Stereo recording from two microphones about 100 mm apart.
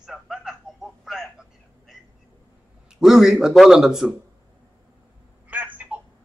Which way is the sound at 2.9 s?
5° right (ahead or behind).